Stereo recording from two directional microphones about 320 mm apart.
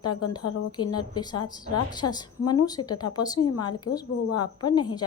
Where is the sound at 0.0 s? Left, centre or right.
Left.